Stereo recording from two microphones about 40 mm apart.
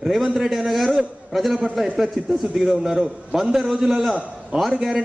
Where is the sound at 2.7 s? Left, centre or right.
Centre.